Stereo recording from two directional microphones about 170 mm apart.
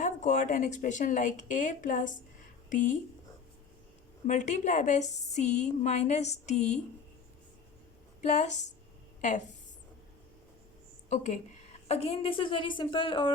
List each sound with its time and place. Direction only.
0.0 s a woman's voice: 45° left (ahead or behind)
4.3 s a woman's voice: 45° left (ahead or behind)
8.2 s a woman's voice: 45° left (ahead or behind)
11.1 s a woman's voice: 40° left (ahead or behind)